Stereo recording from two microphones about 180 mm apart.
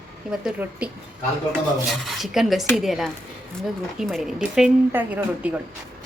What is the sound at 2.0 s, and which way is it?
Speech, centre (ahead or behind).